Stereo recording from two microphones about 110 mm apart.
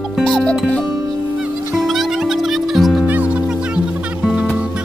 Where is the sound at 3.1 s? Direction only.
15° right (ahead or behind).